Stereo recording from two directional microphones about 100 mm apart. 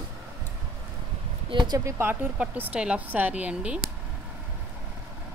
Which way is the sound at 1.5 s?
50° right (ahead or behind).